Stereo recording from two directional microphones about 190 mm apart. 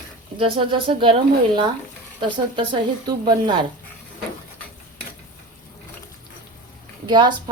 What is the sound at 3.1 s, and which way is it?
Speech, 25° right (ahead or behind).